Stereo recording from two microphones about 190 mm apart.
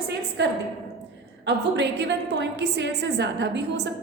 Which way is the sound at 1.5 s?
65° right (ahead or behind).